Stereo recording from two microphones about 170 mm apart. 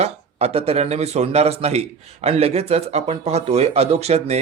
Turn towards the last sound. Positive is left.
turn(degrees=-40)  # may be behind; listen again after turning